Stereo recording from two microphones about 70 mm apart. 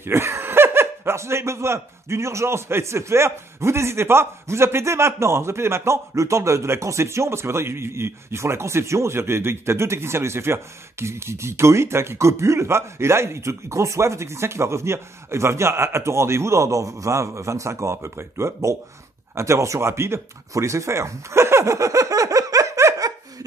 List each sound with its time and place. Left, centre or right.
0.0 s speech: right